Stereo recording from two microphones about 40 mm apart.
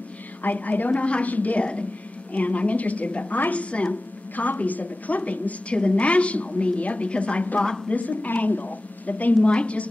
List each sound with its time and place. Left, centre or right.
0.4 s a woman's voice: left
9.5 s a woman's voice: left